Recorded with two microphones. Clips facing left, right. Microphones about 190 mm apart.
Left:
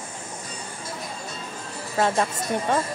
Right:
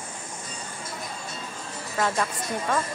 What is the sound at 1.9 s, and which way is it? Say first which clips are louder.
Speech: left 4 dB; 25° left (ahead or behind).